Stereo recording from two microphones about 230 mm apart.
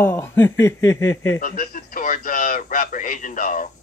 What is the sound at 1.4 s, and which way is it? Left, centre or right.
Speech, left.